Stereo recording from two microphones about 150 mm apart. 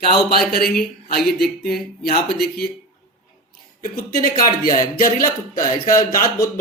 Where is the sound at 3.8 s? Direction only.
75° left (ahead or behind).